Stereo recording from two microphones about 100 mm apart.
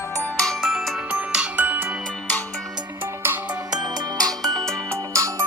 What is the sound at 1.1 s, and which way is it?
Music, 10° right (ahead or behind).